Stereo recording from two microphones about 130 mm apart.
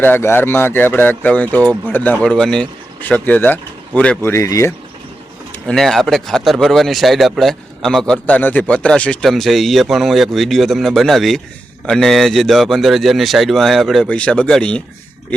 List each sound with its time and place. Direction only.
0.0 s speech: 15° left (ahead or behind)
4.2 s speech: 20° left (ahead or behind)
5.5 s speech: 5° left (ahead or behind)